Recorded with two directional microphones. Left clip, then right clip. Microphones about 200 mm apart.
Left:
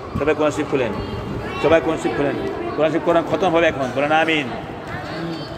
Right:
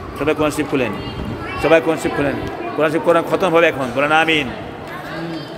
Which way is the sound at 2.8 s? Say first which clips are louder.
Right 2 dB; 25° right (ahead or behind).